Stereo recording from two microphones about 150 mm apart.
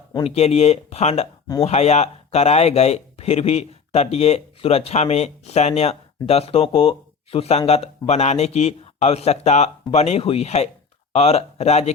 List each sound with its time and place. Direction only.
0.3 s speech: 45° left (ahead or behind)